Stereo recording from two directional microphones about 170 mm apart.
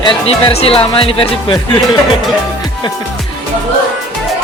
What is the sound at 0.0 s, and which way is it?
Speech, 30° left (ahead or behind).